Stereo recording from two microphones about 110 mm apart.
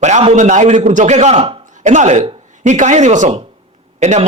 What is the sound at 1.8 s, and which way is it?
Speech, 90° right.